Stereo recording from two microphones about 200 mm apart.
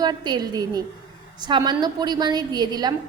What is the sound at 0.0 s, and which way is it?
A woman's voice, 20° right (ahead or behind).